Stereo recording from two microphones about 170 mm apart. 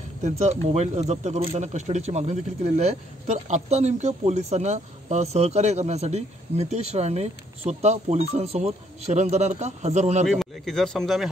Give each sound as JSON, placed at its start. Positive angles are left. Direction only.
{"t": 0.2, "sound": "speech", "side_deg": -45}
{"t": 10.2, "sound": "speech", "side_deg": 0}